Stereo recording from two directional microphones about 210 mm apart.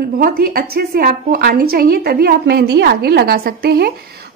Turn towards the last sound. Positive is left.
turn(degrees=-50)  # may be behind; listen again after turning